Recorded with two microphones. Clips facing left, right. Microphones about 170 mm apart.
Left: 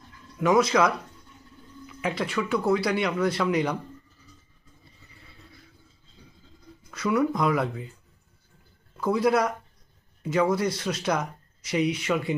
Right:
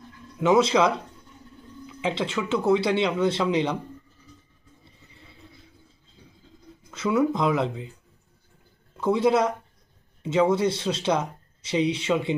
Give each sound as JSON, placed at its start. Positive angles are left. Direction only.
{"t": 0.3, "sound": "speech", "side_deg": -25}
{"t": 6.9, "sound": "speech", "side_deg": -25}
{"t": 9.0, "sound": "speech", "side_deg": -25}